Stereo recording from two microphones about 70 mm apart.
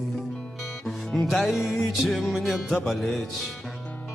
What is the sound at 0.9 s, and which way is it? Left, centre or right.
Music, centre.